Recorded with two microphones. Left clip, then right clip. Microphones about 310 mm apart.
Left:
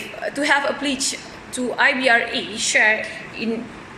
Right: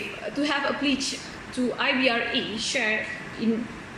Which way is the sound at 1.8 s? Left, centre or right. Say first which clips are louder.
Left 8 dB; left.